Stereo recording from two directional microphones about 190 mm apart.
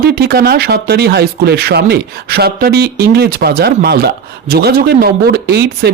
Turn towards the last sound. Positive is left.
turn(degrees=-60)  # may be behind; listen again after turning